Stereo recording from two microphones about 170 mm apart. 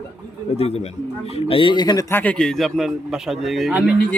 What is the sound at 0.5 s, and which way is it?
A man's voice, 35° left (ahead or behind).